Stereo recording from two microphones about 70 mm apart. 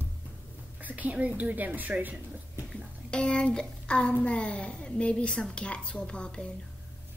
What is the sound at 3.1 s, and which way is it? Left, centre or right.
A child's voice, centre.